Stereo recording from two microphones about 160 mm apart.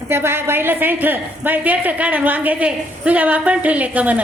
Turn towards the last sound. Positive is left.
turn(degrees=-10)  # may be behind; listen again after turning